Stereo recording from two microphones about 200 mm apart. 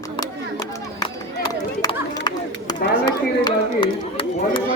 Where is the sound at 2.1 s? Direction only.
20° left (ahead or behind).